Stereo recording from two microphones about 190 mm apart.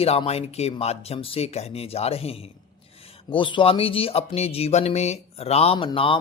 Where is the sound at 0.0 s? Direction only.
30° left (ahead or behind).